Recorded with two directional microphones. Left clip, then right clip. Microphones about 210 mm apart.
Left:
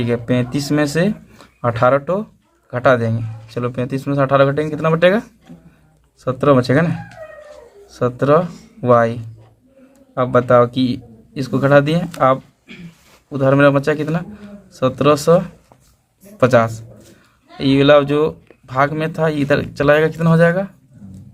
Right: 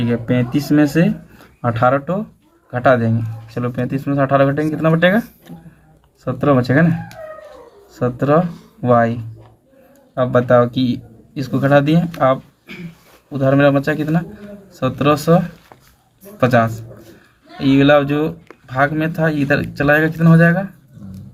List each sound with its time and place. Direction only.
0.0 s speech: 40° left (ahead or behind)
6.2 s speech: 40° left (ahead or behind)
10.2 s speech: 35° left (ahead or behind)
13.3 s speech: 40° left (ahead or behind)